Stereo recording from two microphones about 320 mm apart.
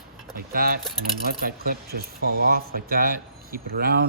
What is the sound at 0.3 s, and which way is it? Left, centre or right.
Speech, right.